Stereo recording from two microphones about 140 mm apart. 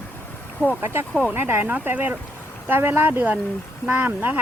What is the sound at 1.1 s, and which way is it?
Speech, 10° right (ahead or behind).